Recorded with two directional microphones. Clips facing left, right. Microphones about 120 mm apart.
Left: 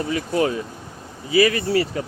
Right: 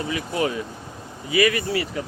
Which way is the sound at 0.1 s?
40° left (ahead or behind).